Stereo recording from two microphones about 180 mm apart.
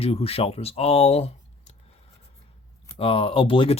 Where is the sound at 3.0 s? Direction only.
30° left (ahead or behind).